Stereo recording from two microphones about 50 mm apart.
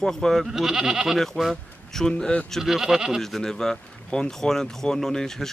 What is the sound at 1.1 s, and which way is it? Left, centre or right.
Speech, centre.